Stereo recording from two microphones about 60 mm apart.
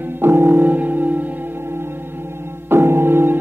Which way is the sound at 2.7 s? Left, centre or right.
Right.